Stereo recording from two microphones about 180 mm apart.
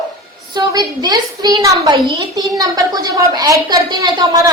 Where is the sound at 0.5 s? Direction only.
20° right (ahead or behind).